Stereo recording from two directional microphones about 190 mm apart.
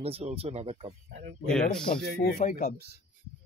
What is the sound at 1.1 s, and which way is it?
Speech, 70° right (ahead or behind).